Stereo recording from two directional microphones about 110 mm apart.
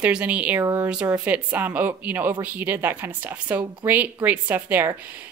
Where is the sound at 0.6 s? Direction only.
30° right (ahead or behind).